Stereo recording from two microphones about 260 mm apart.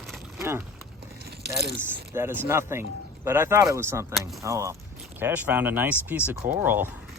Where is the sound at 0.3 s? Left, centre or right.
Centre.